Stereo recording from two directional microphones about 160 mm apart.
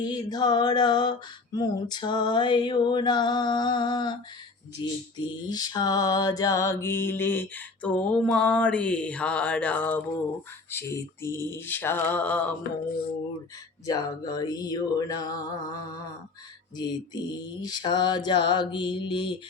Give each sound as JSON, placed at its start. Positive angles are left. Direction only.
{"t": 0.0, "sound": "mantra", "side_deg": 25}
{"t": 13.8, "sound": "mantra", "side_deg": 25}